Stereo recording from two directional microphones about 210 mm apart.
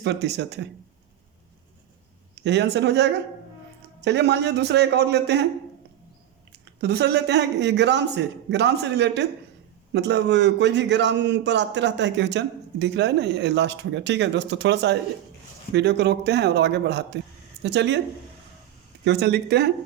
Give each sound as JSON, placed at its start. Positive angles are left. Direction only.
{"t": 0.0, "sound": "a man's voice", "side_deg": -55}
{"t": 2.3, "sound": "a man's voice", "side_deg": -55}
{"t": 6.8, "sound": "a man's voice", "side_deg": -50}
{"t": 19.0, "sound": "a man's voice", "side_deg": -55}